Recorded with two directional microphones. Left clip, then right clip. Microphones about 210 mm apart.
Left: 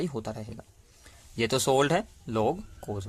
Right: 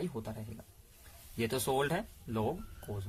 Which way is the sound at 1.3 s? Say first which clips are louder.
Left 8 dB; 40° left (ahead or behind).